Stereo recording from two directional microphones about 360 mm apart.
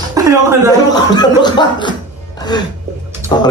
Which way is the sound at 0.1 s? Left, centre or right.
Centre.